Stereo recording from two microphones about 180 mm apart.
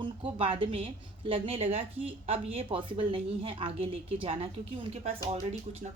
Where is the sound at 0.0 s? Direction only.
30° right (ahead or behind).